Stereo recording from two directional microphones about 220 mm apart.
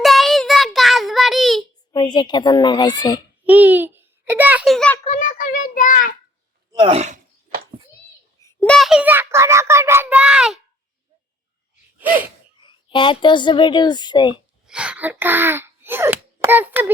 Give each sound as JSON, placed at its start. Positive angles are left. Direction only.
{"t": 0.0, "sound": "child singing", "side_deg": 0}
{"t": 1.9, "sound": "speech", "side_deg": 20}
{"t": 3.4, "sound": "a child's voice", "side_deg": -5}
{"t": 5.0, "sound": "a child's voice", "side_deg": 35}
{"t": 6.7, "sound": "speech", "side_deg": -25}
{"t": 8.4, "sound": "a child's voice", "side_deg": 5}
{"t": 11.9, "sound": "gasp", "side_deg": -10}
{"t": 12.6, "sound": "speech", "side_deg": 20}
{"t": 14.7, "sound": "a child's voice", "side_deg": -5}